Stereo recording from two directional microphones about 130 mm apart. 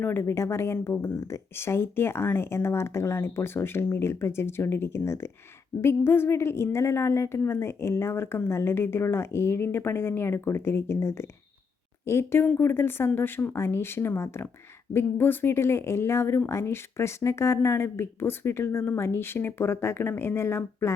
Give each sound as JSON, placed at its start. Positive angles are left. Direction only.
{"t": 0.0, "sound": "speech", "side_deg": 15}